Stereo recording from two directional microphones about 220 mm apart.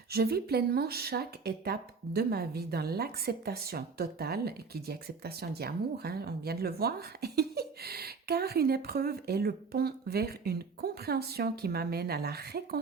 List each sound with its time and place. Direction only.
0.1 s speech: 45° right (ahead or behind)